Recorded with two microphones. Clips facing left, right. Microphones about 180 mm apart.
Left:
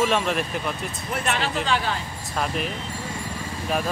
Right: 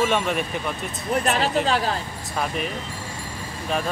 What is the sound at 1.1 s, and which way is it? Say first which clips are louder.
Speech: right 5 dB; 40° right (ahead or behind).